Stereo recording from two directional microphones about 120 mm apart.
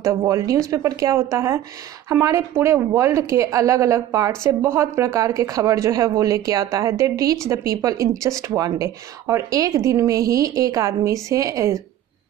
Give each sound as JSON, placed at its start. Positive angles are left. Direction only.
{"t": 0.0, "sound": "speech", "side_deg": -25}